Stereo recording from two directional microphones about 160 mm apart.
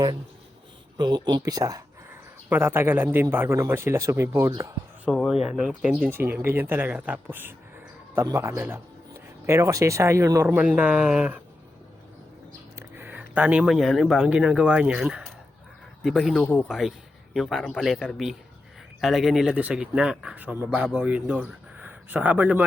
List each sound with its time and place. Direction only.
0.9 s speech: 30° right (ahead or behind)
5.0 s speech: centre (ahead or behind)
13.0 s speech: 10° right (ahead or behind)